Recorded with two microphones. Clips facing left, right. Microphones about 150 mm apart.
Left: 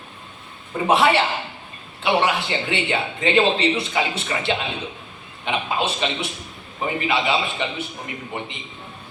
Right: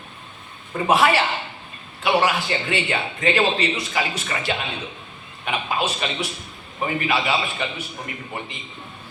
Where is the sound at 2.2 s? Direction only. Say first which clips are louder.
Even; 25° left (ahead or behind).